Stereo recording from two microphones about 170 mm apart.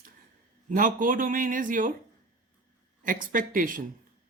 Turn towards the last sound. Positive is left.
turn(degrees=-55)  # may be behind; listen again after turning